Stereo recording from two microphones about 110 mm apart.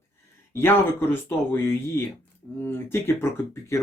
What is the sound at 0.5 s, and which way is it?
Speech, 20° left (ahead or behind).